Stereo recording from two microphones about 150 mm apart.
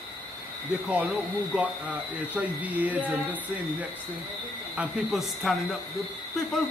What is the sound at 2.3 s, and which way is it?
Speech, 10° right (ahead or behind).